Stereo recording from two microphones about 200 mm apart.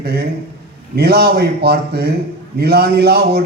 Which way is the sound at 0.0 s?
55° right (ahead or behind).